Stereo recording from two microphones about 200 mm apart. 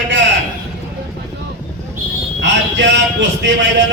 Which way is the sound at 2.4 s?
65° right (ahead or behind).